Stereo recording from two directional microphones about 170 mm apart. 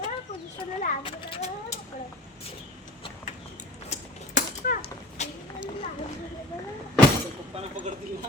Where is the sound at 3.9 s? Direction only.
45° left (ahead or behind).